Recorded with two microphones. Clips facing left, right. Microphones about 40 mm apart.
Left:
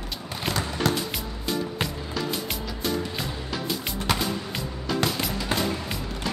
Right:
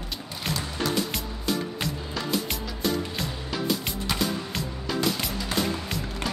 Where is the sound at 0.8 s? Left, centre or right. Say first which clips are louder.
Left 2 dB; left.